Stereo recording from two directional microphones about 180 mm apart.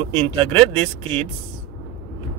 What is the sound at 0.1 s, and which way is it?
Speech, 30° right (ahead or behind).